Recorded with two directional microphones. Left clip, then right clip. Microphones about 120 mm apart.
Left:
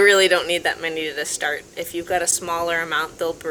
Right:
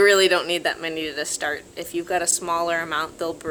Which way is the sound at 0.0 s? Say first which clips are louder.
Left 2 dB; 40° right (ahead or behind).